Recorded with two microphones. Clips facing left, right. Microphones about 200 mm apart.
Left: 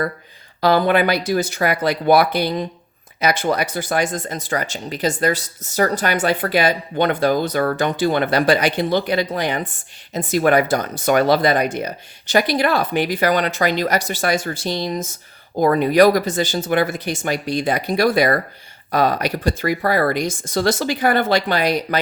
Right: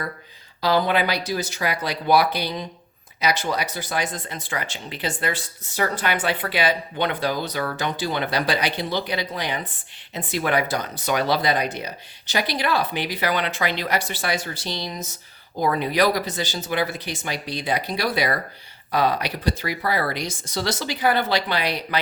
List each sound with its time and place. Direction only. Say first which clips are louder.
0.6 s speech: left 5 dB; 50° left (ahead or behind)